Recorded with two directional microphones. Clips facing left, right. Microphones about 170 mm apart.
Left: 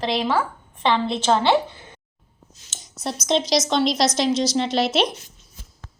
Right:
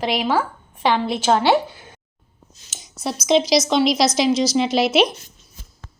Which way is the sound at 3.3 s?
5° right (ahead or behind).